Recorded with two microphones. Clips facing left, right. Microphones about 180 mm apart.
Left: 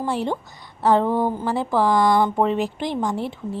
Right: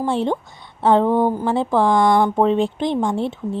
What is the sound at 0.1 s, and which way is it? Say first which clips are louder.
A woman's voice: right 4 dB; 25° right (ahead or behind).